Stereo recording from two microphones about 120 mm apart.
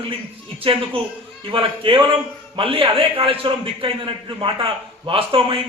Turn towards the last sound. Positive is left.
turn(degrees=-45)  # may be behind; listen again after turning